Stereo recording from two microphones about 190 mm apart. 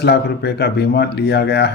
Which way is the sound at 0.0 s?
60° left (ahead or behind).